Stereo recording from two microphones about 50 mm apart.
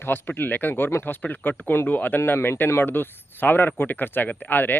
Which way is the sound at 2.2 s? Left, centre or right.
Left.